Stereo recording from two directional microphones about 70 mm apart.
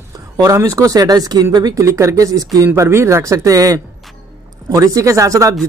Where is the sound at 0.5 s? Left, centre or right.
Right.